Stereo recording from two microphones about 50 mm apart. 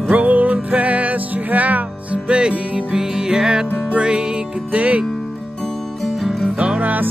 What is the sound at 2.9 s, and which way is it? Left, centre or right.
Music, centre.